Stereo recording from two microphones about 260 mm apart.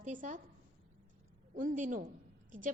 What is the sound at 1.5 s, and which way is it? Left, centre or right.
Speech, right.